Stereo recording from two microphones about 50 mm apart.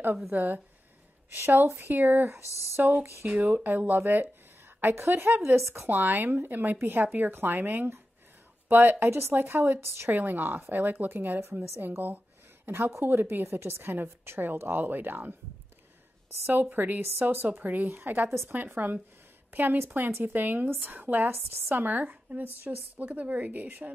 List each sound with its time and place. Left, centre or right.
0.3 s a woman's voice: right
4.9 s a woman's voice: right
5.9 s a woman's voice: right
9.8 s a woman's voice: right
10.1 s a woman's voice: right
12.6 s a woman's voice: right
16.7 s a woman's voice: right